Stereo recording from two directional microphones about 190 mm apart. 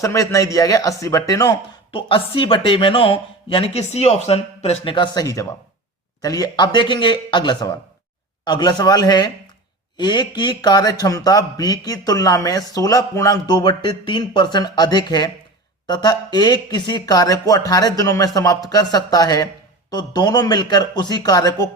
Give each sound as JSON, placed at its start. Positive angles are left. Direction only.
{"t": 0.0, "sound": "speech", "side_deg": 15}